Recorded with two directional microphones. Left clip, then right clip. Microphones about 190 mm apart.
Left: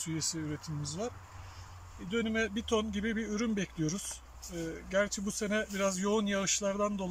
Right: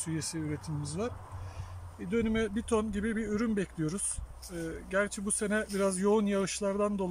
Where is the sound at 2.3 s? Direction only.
5° right (ahead or behind).